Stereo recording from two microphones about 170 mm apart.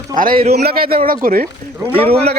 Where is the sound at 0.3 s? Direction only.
40° right (ahead or behind).